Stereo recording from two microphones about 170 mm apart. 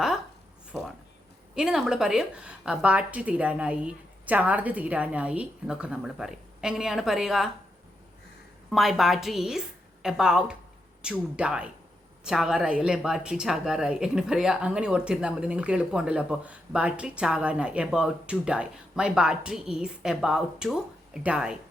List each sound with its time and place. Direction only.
1.5 s a woman's voice: 5° right (ahead or behind)
8.7 s a woman's voice: centre (ahead or behind)